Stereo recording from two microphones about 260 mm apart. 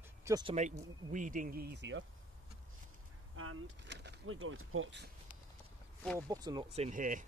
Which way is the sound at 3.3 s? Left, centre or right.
Right.